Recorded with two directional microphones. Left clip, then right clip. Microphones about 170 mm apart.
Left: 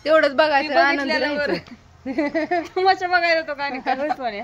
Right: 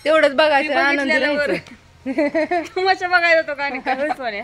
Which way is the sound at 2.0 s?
30° right (ahead or behind).